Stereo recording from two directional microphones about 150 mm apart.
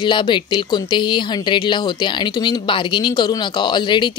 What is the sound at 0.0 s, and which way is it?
Speech, 30° left (ahead or behind).